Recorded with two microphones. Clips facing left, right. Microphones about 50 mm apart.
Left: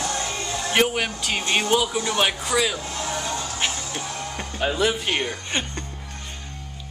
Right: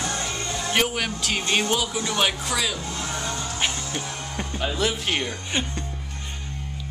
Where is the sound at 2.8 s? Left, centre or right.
Left.